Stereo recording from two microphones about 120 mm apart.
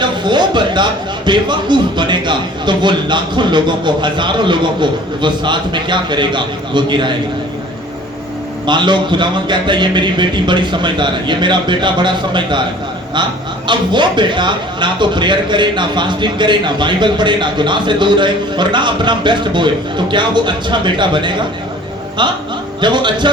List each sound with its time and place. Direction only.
0.0 s speech: 40° right (ahead or behind)
8.6 s speech: 40° right (ahead or behind)
13.7 s speech: 40° right (ahead or behind)